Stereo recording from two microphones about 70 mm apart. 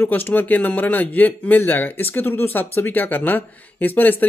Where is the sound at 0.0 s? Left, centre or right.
Left.